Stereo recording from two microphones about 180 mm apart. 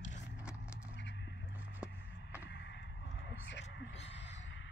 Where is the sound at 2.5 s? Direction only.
80° left.